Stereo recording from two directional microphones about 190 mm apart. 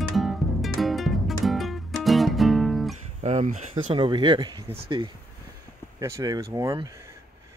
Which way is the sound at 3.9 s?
25° right (ahead or behind).